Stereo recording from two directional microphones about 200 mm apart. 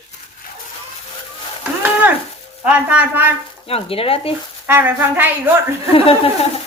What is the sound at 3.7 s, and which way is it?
Speech, 30° left (ahead or behind).